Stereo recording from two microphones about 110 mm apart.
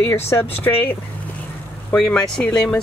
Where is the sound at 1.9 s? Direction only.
10° left (ahead or behind).